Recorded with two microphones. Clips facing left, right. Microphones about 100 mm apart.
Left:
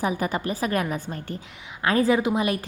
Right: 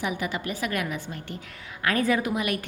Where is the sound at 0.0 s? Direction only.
40° left (ahead or behind).